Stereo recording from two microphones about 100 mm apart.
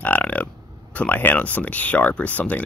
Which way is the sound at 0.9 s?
15° left (ahead or behind).